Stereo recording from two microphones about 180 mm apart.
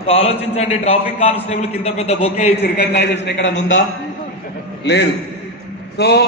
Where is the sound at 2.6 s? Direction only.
70° left (ahead or behind); by 3.8 s 90° left.